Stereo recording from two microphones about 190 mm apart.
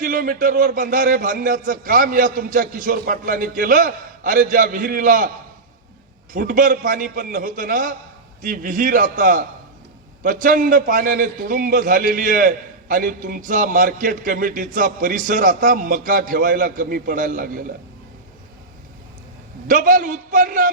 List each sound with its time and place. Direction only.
0.0 s a man's voice: 45° right (ahead or behind)
6.3 s a man's voice: 45° right (ahead or behind)
19.6 s a man's voice: 45° right (ahead or behind)